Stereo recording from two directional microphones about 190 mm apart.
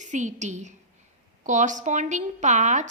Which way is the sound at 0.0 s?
40° right (ahead or behind).